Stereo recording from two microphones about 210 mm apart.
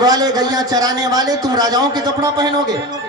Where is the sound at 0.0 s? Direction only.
20° right (ahead or behind).